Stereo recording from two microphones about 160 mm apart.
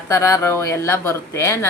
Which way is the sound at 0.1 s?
20° left (ahead or behind).